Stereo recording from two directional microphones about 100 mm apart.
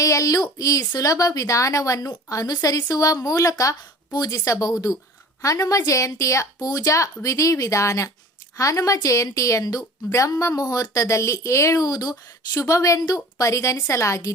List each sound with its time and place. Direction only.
0.0 s a woman's voice: 35° left (ahead or behind)